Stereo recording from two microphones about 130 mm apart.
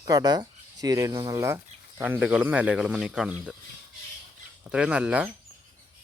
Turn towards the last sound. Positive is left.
turn(degrees=-10)  # may be behind; listen again after turning